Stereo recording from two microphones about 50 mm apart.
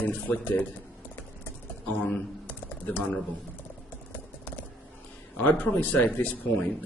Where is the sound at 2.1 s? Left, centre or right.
Left.